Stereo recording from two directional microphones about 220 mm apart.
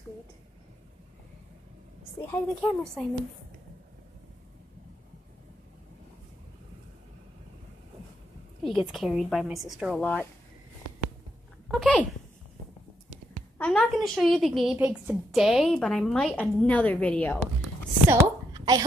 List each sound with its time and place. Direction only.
2.2 s a woman's voice: 5° left (ahead or behind)
8.6 s a woman's voice: centre (ahead or behind)
11.7 s speech: 5° left (ahead or behind)
13.6 s a woman's voice: 5° left (ahead or behind)
18.2 s a sound: 20° right (ahead or behind)